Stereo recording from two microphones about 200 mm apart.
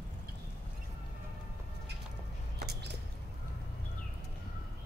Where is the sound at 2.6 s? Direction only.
55° right (ahead or behind).